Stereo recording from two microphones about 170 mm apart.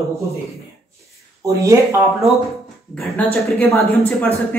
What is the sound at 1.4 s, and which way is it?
Speech, 15° right (ahead or behind).